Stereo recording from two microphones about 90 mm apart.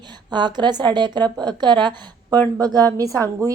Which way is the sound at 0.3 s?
55° right (ahead or behind).